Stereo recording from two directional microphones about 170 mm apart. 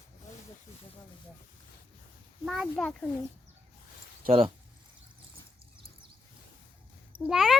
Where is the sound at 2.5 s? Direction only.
Centre (ahead or behind).